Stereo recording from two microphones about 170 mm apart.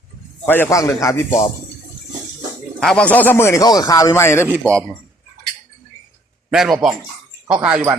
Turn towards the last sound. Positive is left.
turn(degrees=-10)  # may be behind; listen again after turning